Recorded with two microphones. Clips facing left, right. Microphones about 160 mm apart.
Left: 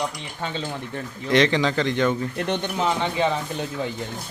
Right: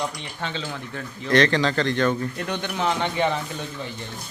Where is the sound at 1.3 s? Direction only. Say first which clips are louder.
Even; 15° left (ahead or behind).